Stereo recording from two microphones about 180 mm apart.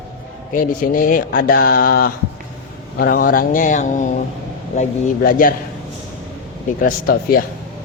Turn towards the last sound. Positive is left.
turn(degrees=50)  # may be behind; listen again after turning